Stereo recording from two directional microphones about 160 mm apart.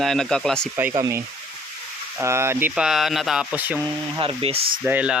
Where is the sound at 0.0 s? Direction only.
Centre (ahead or behind).